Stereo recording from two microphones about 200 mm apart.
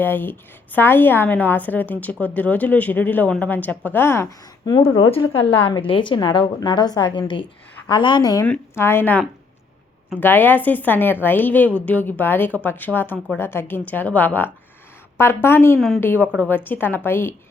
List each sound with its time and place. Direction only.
0.0 s a woman's voice: 10° left (ahead or behind)
5.6 s a woman's voice: 25° left (ahead or behind); by 17.3 s 10° left (ahead or behind)